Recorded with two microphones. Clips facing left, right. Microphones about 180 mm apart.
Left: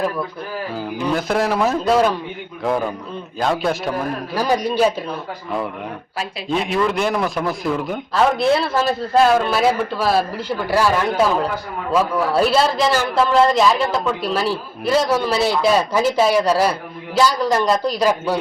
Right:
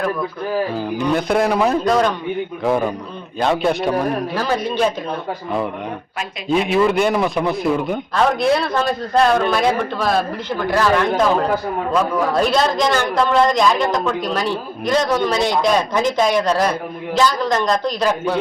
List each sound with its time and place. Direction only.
0.8 s a man's voice: 5° left (ahead or behind)
3.4 s a man's voice: centre (ahead or behind)
4.4 s a man's voice: 15° left (ahead or behind)
6.5 s a man's voice: 5° right (ahead or behind)